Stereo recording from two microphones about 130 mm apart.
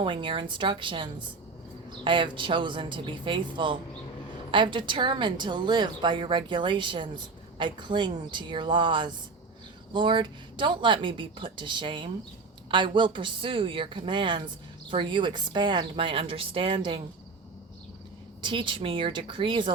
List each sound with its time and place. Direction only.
0.0 s speech: 40° right (ahead or behind)
18.4 s speech: 40° right (ahead or behind)